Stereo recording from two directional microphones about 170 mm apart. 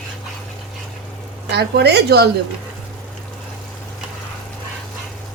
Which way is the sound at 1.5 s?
75° right (ahead or behind).